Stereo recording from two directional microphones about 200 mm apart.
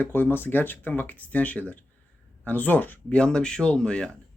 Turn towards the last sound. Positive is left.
turn(degrees=5)  # may be behind; listen again after turning